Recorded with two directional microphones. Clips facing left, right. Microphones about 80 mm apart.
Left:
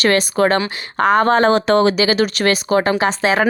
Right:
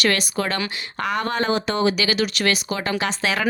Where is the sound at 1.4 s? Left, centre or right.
Left.